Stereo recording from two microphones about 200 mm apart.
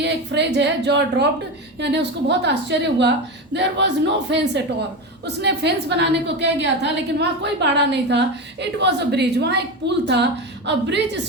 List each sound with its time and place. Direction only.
0.0 s a woman's voice: 60° right (ahead or behind)